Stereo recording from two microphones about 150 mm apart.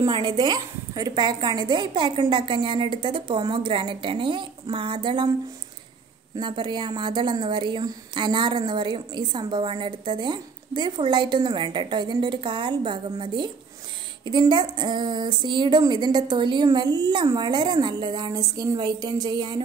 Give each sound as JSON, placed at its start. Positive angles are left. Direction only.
{"t": 0.0, "sound": "speech", "side_deg": -30}
{"t": 6.3, "sound": "speech", "side_deg": -30}